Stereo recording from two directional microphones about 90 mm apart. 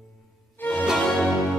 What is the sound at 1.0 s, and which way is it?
Music, 5° left (ahead or behind).